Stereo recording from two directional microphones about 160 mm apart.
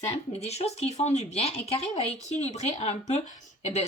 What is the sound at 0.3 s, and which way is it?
Speech, 40° left (ahead or behind).